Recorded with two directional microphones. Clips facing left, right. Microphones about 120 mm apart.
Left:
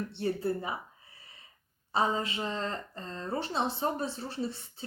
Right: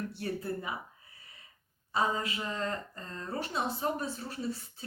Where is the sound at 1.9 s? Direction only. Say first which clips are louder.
Left 2 dB; 30° left (ahead or behind).